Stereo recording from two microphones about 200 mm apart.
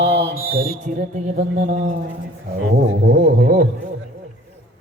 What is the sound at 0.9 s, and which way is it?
Speech, 40° right (ahead or behind).